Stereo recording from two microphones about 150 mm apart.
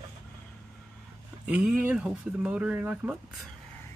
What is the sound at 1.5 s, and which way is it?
Speech, 10° right (ahead or behind).